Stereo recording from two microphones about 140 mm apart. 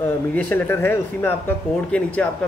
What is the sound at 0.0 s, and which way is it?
A man's voice, 15° left (ahead or behind).